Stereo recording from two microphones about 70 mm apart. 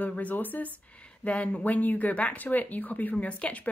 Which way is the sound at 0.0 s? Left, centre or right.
Left.